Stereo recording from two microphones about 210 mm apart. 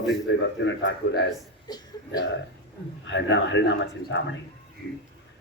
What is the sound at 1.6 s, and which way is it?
Chuckle, 20° left (ahead or behind).